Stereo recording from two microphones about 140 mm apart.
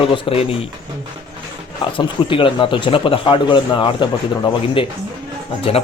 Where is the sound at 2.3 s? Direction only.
35° left (ahead or behind).